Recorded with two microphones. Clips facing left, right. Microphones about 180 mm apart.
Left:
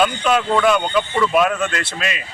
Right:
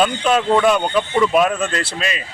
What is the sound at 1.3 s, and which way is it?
Speech, 5° right (ahead or behind).